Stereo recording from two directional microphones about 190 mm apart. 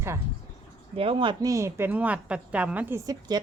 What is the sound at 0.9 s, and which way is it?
A woman's voice, 25° right (ahead or behind).